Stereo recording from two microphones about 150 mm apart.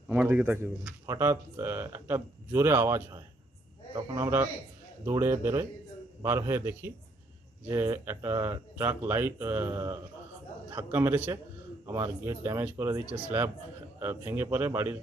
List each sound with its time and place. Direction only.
0.1 s a man's voice: 10° right (ahead or behind)
4.2 s speech: 15° right (ahead or behind)